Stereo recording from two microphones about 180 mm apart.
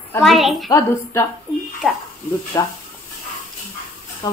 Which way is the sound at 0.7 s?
15° left (ahead or behind).